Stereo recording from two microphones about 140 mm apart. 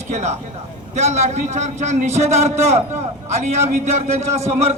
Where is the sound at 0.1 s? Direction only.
55° right (ahead or behind).